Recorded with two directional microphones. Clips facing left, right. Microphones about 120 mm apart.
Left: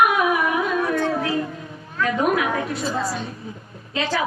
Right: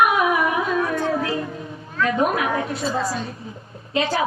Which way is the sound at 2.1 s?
25° right (ahead or behind).